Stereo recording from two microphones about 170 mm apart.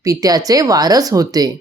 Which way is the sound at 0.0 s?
20° right (ahead or behind).